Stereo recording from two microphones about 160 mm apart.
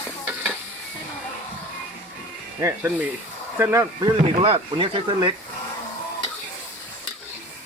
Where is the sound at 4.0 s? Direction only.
30° right (ahead or behind).